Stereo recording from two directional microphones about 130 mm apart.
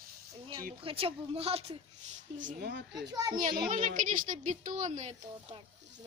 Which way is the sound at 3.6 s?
90° right.